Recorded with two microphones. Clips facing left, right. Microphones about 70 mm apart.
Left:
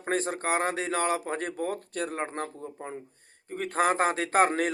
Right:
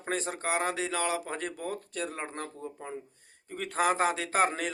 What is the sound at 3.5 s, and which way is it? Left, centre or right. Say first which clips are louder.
Speech: left 2 dB; left.